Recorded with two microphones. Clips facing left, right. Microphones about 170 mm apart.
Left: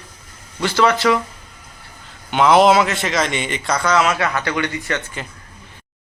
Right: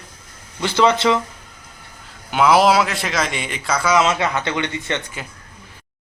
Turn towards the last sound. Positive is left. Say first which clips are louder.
# left 1 dB
turn(degrees=-20)  # may be behind; listen again after turning